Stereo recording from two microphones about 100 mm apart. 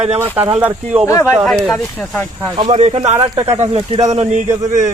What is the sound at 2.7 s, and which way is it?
Speech, 90° right.